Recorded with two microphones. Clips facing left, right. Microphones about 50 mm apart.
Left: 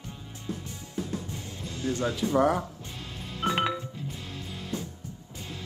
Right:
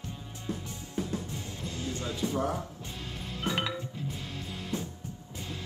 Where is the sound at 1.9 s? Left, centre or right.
Left.